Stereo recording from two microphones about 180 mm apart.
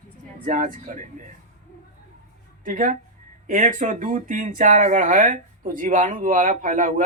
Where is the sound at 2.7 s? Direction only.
45° right (ahead or behind).